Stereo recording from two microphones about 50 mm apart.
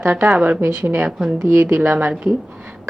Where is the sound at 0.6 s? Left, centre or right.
Right.